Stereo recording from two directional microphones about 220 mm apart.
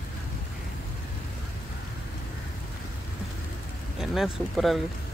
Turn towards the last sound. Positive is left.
turn(degrees=0)  # may be behind; listen again after turning